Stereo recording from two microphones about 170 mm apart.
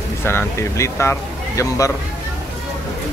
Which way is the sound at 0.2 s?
15° left (ahead or behind).